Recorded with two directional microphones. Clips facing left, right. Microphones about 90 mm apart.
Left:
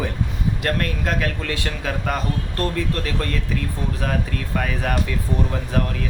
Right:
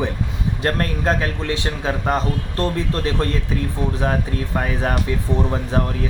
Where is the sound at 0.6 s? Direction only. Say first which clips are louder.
Right 4 dB; 35° right (ahead or behind).